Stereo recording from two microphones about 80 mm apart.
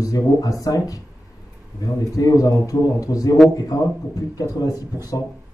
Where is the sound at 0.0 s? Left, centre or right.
Left.